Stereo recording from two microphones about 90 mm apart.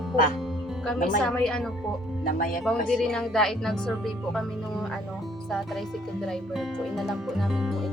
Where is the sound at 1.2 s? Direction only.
10° left (ahead or behind).